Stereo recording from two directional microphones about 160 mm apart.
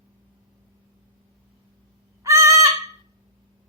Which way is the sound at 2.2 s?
20° right (ahead or behind).